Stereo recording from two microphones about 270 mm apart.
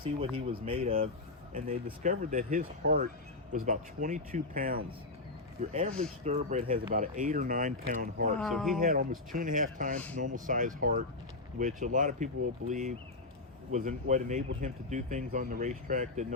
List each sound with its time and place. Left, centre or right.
0.3 s speech: right
8.4 s a man's voice: centre
8.8 s speech: right